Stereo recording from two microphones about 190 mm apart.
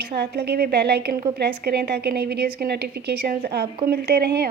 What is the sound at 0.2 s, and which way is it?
A woman's voice, 55° right (ahead or behind).